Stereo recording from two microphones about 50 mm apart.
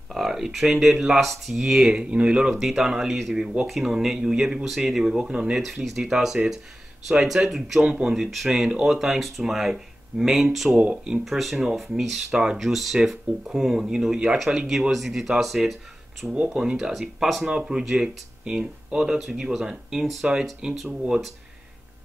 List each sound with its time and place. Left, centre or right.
0.1 s speech: centre
1.6 s speech: centre
2.5 s speech: centre
4.6 s speech: centre
5.6 s speech: centre
10.7 s speech: right
11.2 s speech: centre
12.3 s speech: centre
12.5 s speech: centre
16.6 s speech: centre
20.6 s speech: centre